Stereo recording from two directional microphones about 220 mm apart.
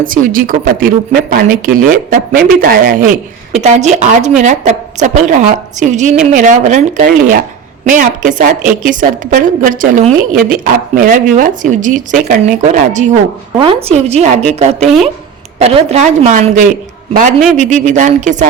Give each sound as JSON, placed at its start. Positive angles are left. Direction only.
{"t": 0.0, "sound": "a woman's voice", "side_deg": -40}